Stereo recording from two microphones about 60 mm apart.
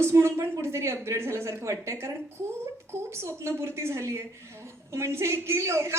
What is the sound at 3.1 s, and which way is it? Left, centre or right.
A woman's voice, right.